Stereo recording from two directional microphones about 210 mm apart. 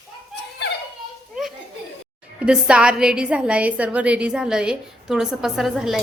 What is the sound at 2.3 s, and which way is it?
A woman's voice, 5° right (ahead or behind).